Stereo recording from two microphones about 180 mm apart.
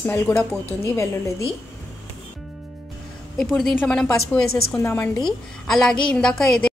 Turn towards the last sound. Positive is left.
turn(degrees=5)  # may be behind; listen again after turning